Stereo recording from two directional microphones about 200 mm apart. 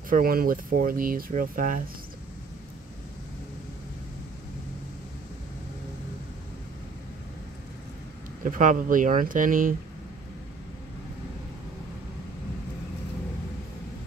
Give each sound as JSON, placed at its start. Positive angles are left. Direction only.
{"t": 0.1, "sound": "speech", "side_deg": -45}
{"t": 8.5, "sound": "speech", "side_deg": -40}